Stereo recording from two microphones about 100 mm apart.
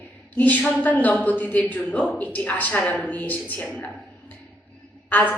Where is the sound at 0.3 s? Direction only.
15° left (ahead or behind).